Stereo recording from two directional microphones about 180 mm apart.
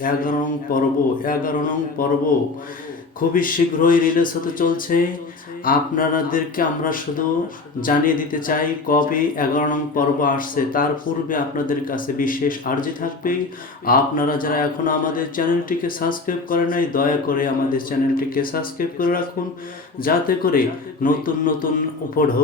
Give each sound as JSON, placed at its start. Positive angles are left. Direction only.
{"t": 0.0, "sound": "speech", "side_deg": 50}
{"t": 3.2, "sound": "speech", "side_deg": 50}